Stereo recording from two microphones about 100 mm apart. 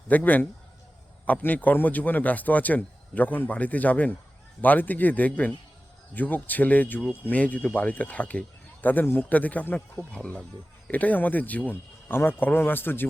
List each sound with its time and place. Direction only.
0.1 s a man's voice: 15° left (ahead or behind)